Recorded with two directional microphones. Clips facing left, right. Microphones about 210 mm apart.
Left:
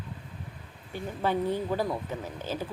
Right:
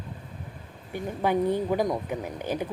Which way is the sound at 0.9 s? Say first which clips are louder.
Right 3 dB; 15° right (ahead or behind).